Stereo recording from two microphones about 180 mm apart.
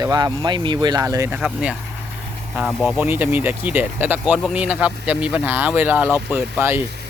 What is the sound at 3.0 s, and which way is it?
Speech, 10° right (ahead or behind).